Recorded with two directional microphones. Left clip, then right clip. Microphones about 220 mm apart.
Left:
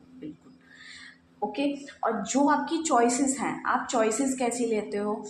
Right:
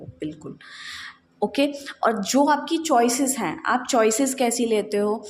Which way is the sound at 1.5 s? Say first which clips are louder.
Right 7 dB; 50° right (ahead or behind).